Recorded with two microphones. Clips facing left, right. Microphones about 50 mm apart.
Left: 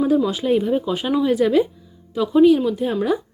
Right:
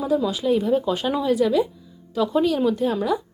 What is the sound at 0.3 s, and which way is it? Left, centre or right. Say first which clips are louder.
Speech: left 1 dB; left.